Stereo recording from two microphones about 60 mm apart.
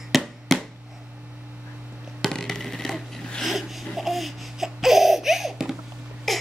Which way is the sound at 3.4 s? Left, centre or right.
Centre.